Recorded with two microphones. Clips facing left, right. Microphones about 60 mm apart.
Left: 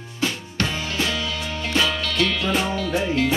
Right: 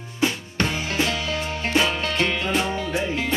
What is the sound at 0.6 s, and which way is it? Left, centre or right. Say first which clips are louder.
Music: right 1 dB; right.